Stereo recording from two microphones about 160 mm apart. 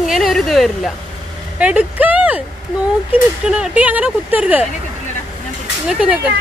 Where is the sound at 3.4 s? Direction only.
5° right (ahead or behind).